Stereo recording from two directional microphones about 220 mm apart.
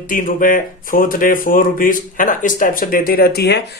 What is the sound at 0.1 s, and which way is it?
Speech, 40° left (ahead or behind).